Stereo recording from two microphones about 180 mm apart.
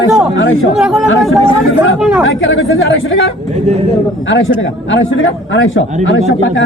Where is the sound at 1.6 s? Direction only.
90° left.